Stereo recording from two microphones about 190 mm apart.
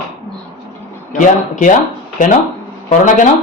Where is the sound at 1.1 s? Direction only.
40° left (ahead or behind).